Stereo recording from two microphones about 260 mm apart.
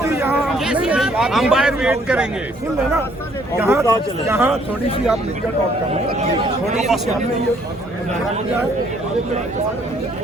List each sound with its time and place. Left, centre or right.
0.0 s a sound: centre
3.6 s speech: centre
5.9 s speech: right